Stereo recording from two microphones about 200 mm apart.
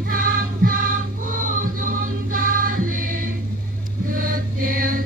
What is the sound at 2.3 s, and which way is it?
Music, 45° right (ahead or behind).